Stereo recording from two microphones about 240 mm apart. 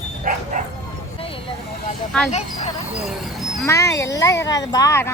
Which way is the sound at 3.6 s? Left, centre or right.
Centre.